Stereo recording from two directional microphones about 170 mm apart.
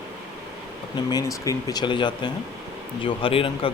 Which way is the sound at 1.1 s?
20° left (ahead or behind).